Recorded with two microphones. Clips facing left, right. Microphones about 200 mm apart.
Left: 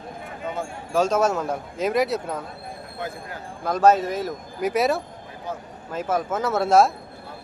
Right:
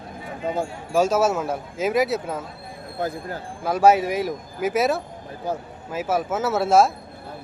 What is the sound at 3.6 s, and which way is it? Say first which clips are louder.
Speech: right 1 dB; 10° right (ahead or behind).